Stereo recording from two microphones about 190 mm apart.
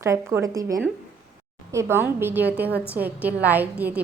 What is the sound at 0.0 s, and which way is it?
A woman's voice, 15° right (ahead or behind).